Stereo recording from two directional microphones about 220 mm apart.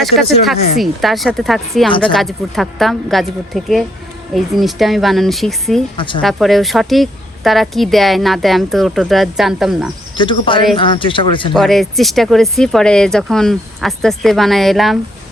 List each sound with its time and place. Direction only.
0.0 s a woman's voice: centre (ahead or behind)
6.0 s speech: 20° left (ahead or behind)
6.2 s a woman's voice: centre (ahead or behind)
10.2 s speech: 20° left (ahead or behind)
11.5 s a woman's voice: centre (ahead or behind)